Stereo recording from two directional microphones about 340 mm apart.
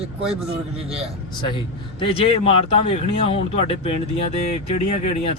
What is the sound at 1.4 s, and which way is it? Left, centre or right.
A man's voice, centre.